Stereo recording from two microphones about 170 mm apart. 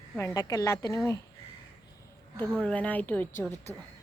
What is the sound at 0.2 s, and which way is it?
Speech, 20° left (ahead or behind).